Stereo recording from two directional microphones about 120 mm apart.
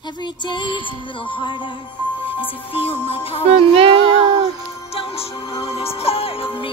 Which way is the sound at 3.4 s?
55° right (ahead or behind).